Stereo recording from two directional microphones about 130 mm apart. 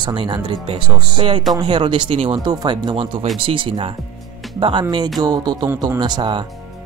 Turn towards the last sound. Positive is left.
turn(degrees=-35)  # may be behind; listen again after turning